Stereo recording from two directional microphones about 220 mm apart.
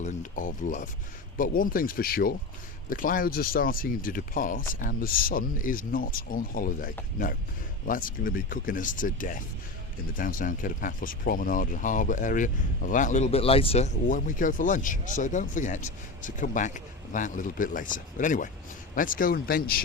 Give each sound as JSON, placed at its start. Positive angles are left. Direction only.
{"t": 0.0, "sound": "speech", "side_deg": 35}